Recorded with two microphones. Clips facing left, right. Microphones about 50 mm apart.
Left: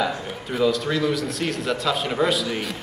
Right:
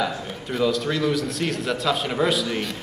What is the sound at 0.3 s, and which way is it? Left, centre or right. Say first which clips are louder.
A man's voice: left 1 dB; centre.